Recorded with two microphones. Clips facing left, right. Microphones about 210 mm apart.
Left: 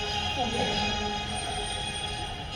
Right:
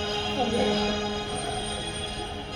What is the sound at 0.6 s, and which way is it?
Speech, 55° right (ahead or behind).